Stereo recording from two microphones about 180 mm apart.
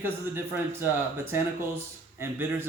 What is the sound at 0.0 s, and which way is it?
Speech, 10° right (ahead or behind).